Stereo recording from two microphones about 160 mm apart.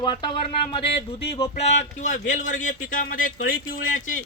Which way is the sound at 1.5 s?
45° left (ahead or behind).